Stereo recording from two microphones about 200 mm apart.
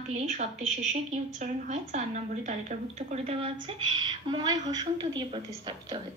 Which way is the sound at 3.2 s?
25° right (ahead or behind).